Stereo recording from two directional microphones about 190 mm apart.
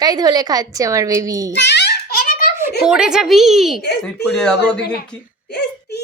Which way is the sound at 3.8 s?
60° left (ahead or behind).